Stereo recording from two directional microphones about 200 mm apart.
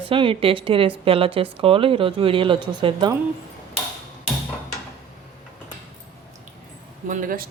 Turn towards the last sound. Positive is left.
turn(degrees=-45)  # may be behind; listen again after turning